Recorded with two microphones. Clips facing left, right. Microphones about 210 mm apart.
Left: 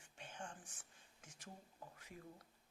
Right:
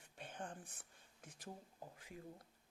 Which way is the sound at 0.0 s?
55° right (ahead or behind).